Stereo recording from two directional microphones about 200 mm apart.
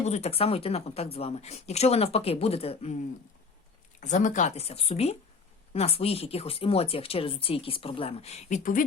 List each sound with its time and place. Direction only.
0.0 s speech: 35° left (ahead or behind)
4.0 s speech: 40° left (ahead or behind)